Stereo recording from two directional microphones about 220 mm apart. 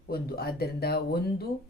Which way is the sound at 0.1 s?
45° left (ahead or behind).